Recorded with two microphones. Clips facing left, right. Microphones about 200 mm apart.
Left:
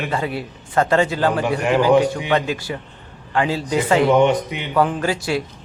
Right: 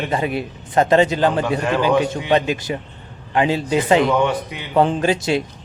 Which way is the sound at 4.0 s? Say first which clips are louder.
Left 3 dB; 20° left (ahead or behind).